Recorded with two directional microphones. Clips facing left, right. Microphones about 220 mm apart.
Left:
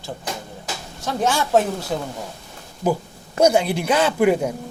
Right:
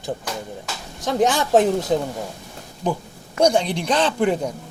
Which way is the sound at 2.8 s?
5° left (ahead or behind).